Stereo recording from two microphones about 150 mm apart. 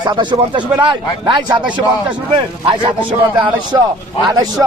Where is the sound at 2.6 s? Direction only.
30° right (ahead or behind).